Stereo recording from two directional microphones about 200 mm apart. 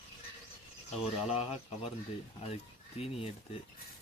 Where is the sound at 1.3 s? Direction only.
30° left (ahead or behind).